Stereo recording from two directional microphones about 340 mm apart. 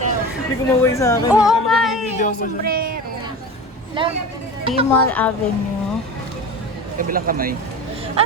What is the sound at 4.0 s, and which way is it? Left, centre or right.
Speech, centre.